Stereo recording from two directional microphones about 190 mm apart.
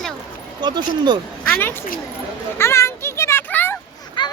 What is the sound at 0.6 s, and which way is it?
Speech, 25° right (ahead or behind).